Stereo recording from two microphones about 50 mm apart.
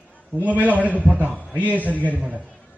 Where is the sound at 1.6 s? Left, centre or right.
Right.